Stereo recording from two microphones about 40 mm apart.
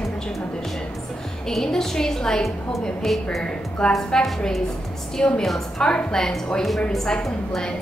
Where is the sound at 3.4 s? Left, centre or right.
Left.